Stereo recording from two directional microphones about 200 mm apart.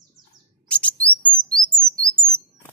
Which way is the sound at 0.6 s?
5° left (ahead or behind).